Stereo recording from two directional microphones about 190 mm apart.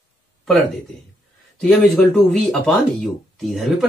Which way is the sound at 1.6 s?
Centre (ahead or behind).